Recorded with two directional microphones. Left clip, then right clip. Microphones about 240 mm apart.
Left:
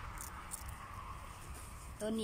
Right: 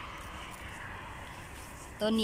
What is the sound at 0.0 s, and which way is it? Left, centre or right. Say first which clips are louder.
Vehicle: right 6 dB; right.